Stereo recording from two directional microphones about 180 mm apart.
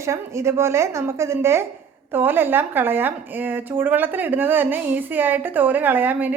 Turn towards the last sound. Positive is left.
turn(degrees=-10)  # may be behind; listen again after turning